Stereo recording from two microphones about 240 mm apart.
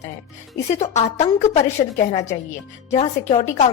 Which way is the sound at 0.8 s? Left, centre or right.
Left.